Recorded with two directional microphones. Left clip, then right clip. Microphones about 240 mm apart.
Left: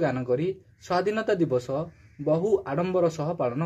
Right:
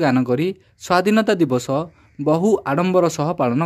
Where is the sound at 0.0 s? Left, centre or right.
Right.